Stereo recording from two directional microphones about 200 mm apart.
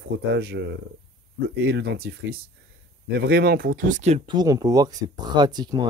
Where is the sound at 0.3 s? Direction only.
55° right (ahead or behind); by 4.2 s 35° right (ahead or behind).